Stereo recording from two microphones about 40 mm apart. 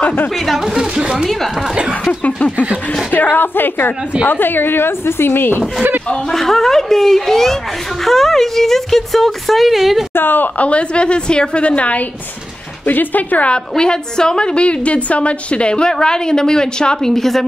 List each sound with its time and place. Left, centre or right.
0.7 s a woman's voice: centre
2.2 s speech: left
3.1 s a woman's voice: left
6.3 s speech: centre
10.1 s a woman's voice: left
10.6 s a woman's voice: left
12.8 s speech: left
13.5 s a woman's voice: left
17.1 s speech: centre